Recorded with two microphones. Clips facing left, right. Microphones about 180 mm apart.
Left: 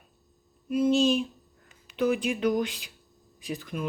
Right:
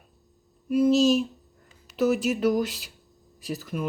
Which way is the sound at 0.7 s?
5° right (ahead or behind).